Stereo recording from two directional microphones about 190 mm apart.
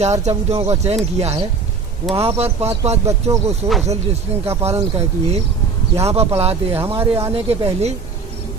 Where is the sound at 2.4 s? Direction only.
35° right (ahead or behind).